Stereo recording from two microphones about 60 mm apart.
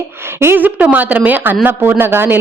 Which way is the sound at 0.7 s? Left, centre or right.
Right.